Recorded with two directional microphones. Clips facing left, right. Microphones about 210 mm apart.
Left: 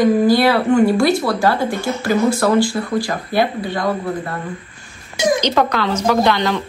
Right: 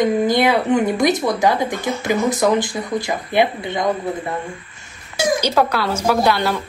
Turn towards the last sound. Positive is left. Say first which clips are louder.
# left 1 dB
turn(degrees=-10)  # may be behind; listen again after turning